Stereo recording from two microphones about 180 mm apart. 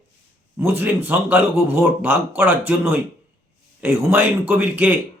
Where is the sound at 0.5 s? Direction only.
10° right (ahead or behind).